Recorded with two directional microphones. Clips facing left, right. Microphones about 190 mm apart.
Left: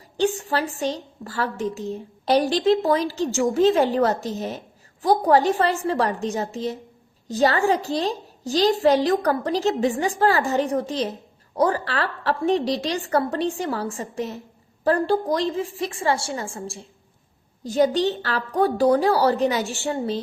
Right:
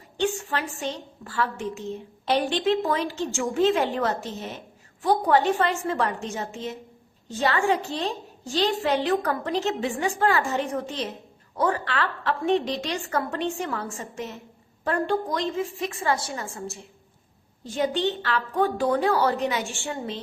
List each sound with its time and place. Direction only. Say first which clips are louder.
0.2 s a woman's voice: left 4 dB; 35° left (ahead or behind)